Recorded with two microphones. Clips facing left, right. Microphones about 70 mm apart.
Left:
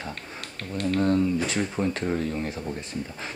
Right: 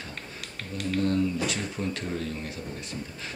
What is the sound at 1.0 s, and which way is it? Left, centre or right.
Speech, left.